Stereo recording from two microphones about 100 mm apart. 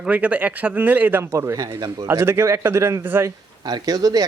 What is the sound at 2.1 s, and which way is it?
Speech, 25° right (ahead or behind).